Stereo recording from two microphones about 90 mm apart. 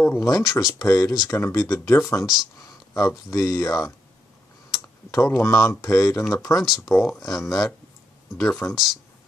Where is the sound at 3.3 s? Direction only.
45° left (ahead or behind).